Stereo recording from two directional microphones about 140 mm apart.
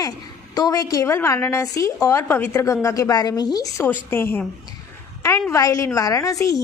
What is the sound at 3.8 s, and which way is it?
A woman's voice, 15° left (ahead or behind).